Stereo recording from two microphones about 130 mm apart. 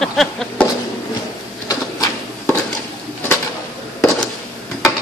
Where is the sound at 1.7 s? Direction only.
25° left (ahead or behind).